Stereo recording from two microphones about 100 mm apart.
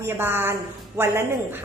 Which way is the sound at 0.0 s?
20° right (ahead or behind).